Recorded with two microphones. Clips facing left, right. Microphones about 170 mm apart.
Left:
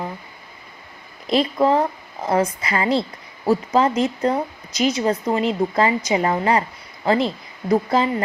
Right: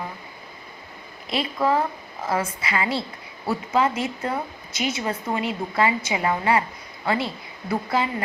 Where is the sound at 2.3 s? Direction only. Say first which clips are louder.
Left 6 dB; 40° left (ahead or behind).